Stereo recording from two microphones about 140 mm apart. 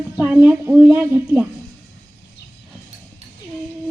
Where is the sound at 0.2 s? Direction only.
10° right (ahead or behind).